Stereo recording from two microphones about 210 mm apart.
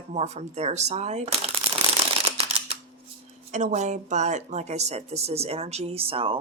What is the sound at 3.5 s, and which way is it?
Speech, 35° right (ahead or behind).